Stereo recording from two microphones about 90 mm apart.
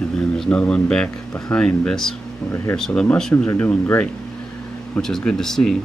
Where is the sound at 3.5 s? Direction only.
20° left (ahead or behind).